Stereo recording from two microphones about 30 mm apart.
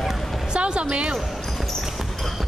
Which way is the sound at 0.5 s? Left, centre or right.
Right.